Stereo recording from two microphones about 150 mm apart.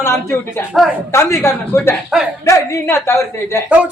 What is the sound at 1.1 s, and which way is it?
A man's voice, 20° left (ahead or behind).